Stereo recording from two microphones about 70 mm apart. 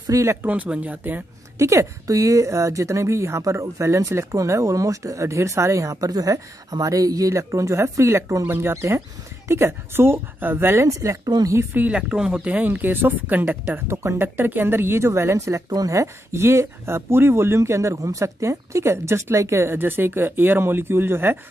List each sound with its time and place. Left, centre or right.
0.1 s speech: right
0.4 s speech: right
1.6 s a woman's voice: right
10.9 s speech: right
11.7 s speech: right
12.1 s speech: centre
13.7 s a woman's voice: right
14.1 s a woman's voice: right